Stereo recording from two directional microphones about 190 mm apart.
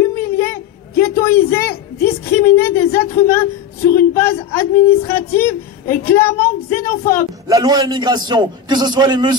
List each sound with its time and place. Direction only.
0.0 s a sound: 15° left (ahead or behind)
2.3 s a woman's voice: 15° left (ahead or behind)
7.4 s a man's voice: 20° right (ahead or behind)